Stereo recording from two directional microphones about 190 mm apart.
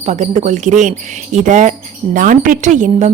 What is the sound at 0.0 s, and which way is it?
A woman's voice, 35° right (ahead or behind).